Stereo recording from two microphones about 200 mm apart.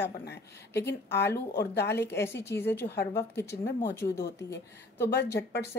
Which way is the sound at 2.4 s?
55° left (ahead or behind).